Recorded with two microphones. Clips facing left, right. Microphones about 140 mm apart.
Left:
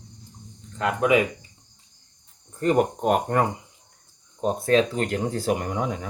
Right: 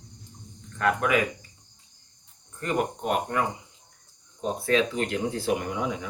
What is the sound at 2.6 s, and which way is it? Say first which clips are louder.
Speech: left 7 dB; 40° left (ahead or behind).